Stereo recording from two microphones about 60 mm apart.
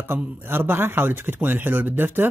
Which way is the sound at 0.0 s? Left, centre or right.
Right.